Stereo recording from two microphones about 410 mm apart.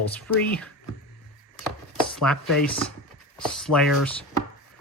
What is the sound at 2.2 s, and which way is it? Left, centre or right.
Speech, centre.